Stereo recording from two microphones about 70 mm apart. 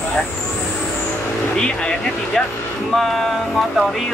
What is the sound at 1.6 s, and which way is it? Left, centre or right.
Speech, centre.